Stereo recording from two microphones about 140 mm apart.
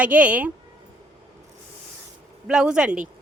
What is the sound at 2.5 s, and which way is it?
Speech, 5° right (ahead or behind).